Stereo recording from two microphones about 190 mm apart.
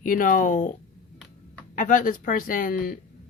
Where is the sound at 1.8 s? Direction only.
45° left (ahead or behind).